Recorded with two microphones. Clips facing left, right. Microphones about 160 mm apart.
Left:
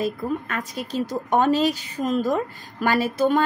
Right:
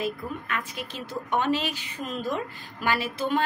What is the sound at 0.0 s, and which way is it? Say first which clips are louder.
A woman's voice: left 6 dB; 40° left (ahead or behind).